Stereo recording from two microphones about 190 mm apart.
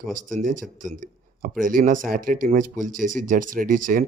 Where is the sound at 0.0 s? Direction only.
45° right (ahead or behind).